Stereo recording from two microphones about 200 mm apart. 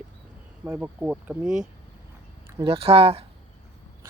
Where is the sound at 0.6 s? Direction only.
10° right (ahead or behind).